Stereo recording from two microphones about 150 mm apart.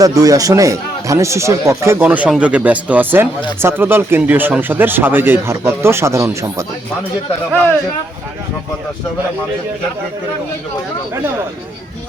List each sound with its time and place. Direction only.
0.0 s speech: 25° right (ahead or behind)